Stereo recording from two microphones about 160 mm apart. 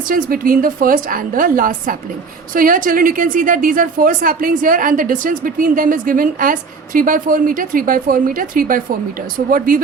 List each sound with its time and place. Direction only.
0.1 s a woman's voice: 60° right (ahead or behind)